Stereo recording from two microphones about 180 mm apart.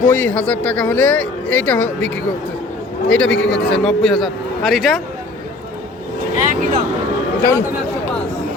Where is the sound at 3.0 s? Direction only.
90° left.